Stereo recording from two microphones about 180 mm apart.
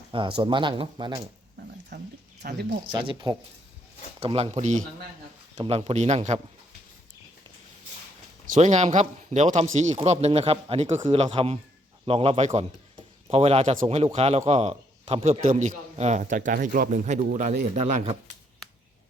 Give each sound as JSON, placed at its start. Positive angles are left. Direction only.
{"t": 0.1, "sound": "speech", "side_deg": -25}
{"t": 1.9, "sound": "a sound", "side_deg": -70}
{"t": 2.4, "sound": "speech", "side_deg": -65}
{"t": 2.8, "sound": "a man's voice", "side_deg": -25}
{"t": 8.5, "sound": "a man's voice", "side_deg": -40}